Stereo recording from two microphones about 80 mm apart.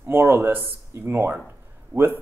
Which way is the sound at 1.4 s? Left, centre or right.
Right.